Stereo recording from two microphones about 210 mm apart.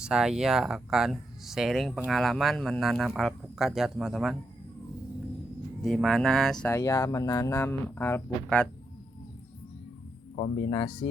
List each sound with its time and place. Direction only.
0.0 s speech: 5° right (ahead or behind)
5.8 s speech: centre (ahead or behind)
10.7 s speech: 20° left (ahead or behind)